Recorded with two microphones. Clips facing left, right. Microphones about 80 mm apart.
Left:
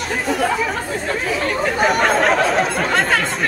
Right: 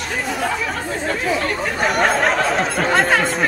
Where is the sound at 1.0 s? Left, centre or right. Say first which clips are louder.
Right 2 dB; centre.